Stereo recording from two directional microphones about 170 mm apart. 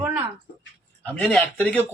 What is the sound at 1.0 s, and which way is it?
Speech, 5° left (ahead or behind).